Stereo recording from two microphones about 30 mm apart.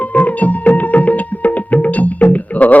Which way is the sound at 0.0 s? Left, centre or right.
Left.